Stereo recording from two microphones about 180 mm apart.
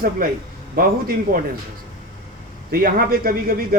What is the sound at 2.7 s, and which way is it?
Speech, 55° right (ahead or behind).